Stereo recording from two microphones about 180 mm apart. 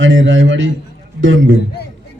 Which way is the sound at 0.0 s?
90° right.